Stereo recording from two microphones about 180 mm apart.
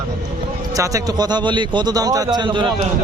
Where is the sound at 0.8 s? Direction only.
20° right (ahead or behind).